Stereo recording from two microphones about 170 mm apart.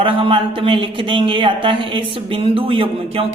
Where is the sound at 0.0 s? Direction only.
30° right (ahead or behind).